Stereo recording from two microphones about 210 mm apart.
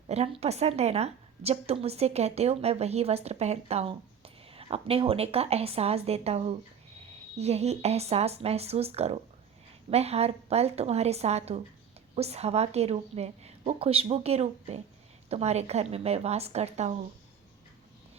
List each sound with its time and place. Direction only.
0.1 s a woman's voice: 30° right (ahead or behind)